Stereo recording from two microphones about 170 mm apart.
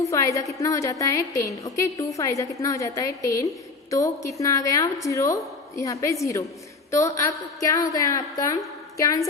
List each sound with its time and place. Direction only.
0.0 s a woman's voice: 20° left (ahead or behind)